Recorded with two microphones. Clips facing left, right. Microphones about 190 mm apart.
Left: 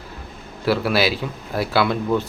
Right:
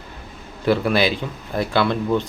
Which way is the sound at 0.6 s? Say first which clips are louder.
Right 1 dB; 5° left (ahead or behind).